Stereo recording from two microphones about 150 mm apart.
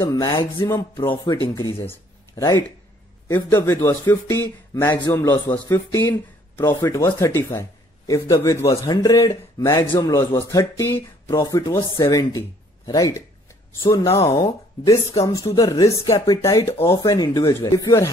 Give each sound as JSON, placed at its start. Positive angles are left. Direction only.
{"t": 0.0, "sound": "speech", "side_deg": 25}
{"t": 1.8, "sound": "speech", "side_deg": 20}
{"t": 14.3, "sound": "speech", "side_deg": 25}